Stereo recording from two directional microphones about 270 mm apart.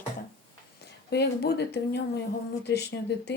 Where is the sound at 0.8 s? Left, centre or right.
Left.